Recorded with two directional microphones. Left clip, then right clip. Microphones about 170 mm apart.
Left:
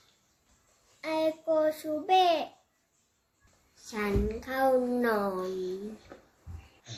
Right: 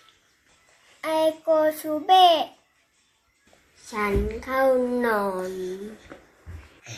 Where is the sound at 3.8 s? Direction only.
10° left (ahead or behind).